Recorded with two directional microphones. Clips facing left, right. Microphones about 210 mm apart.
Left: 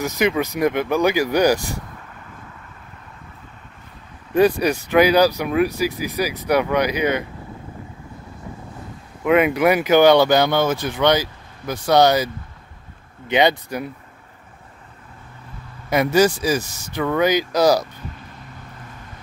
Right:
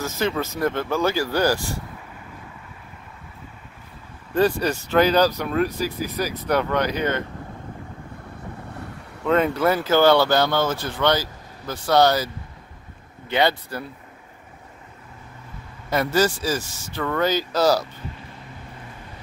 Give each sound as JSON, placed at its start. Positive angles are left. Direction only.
{"t": 0.0, "sound": "speech", "side_deg": 15}
{"t": 4.3, "sound": "speech", "side_deg": 15}
{"t": 9.2, "sound": "speech", "side_deg": 10}
{"t": 13.3, "sound": "speech", "side_deg": 15}
{"t": 15.9, "sound": "speech", "side_deg": 15}